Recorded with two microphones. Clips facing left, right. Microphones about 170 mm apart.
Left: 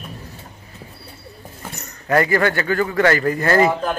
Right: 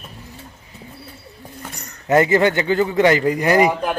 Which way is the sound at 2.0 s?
20° right (ahead or behind).